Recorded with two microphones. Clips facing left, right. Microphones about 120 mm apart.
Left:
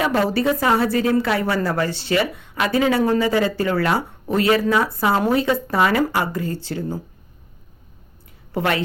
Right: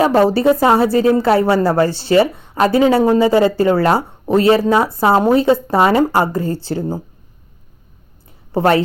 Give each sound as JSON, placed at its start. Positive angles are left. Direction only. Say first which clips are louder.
{"t": 0.0, "sound": "a woman's voice", "louder": "right 7 dB", "side_deg": -30}
{"t": 8.5, "sound": "a woman's voice", "louder": "right 8 dB", "side_deg": -30}